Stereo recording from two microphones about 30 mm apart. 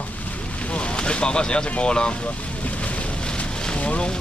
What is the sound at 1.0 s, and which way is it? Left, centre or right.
Speech, left.